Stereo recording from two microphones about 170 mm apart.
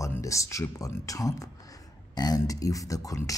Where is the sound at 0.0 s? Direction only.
20° left (ahead or behind).